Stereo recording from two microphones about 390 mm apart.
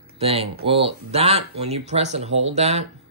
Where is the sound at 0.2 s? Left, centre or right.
Centre.